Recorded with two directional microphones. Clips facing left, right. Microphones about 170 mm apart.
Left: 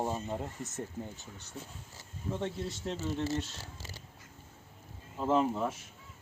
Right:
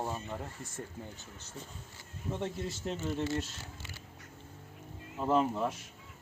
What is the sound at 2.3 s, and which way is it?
Speech, 5° right (ahead or behind).